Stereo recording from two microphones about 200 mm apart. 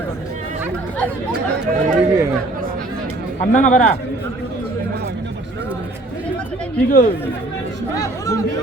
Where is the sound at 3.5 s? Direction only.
40° left (ahead or behind).